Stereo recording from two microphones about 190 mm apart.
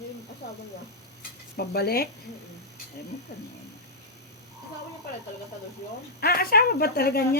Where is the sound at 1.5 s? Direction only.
55° left (ahead or behind).